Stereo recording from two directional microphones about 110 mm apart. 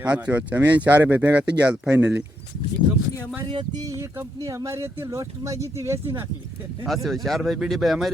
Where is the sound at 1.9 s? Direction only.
20° right (ahead or behind).